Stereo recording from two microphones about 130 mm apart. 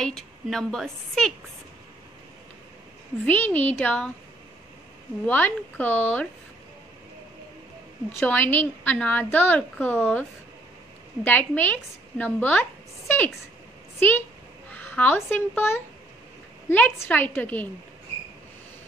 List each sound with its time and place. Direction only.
0.0 s a woman's voice: 5° left (ahead or behind)
3.3 s a woman's voice: 10° left (ahead or behind)
5.2 s a woman's voice: 10° left (ahead or behind)
8.2 s a woman's voice: 10° left (ahead or behind)
11.2 s a woman's voice: 15° left (ahead or behind)
13.9 s a woman's voice: 15° left (ahead or behind)